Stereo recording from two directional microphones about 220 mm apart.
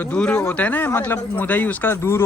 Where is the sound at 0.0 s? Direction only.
5° left (ahead or behind).